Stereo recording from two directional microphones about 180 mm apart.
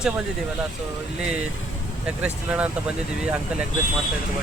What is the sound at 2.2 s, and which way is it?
Speech, 5° right (ahead or behind).